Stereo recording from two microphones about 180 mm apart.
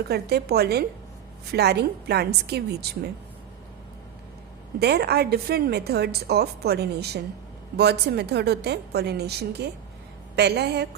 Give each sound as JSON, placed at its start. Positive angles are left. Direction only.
{"t": 0.1, "sound": "a woman's voice", "side_deg": -65}
{"t": 4.8, "sound": "a woman's voice", "side_deg": -65}